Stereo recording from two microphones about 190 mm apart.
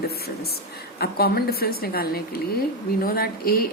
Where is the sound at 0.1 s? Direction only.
55° left (ahead or behind).